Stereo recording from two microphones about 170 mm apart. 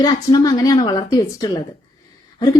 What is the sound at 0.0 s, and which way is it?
A woman's voice, 20° left (ahead or behind).